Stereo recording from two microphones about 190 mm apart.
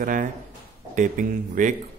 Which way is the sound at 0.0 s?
45° right (ahead or behind).